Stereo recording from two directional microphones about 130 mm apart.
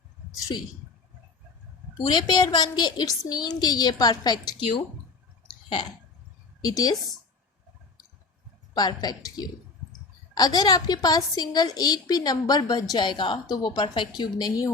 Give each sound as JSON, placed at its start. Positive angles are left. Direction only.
{"t": 2.1, "sound": "a woman's voice", "side_deg": 35}
{"t": 6.6, "sound": "a woman's voice", "side_deg": 25}
{"t": 8.7, "sound": "a woman's voice", "side_deg": 30}